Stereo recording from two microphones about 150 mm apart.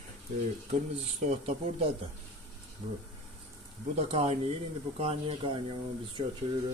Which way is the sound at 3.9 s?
45° right (ahead or behind).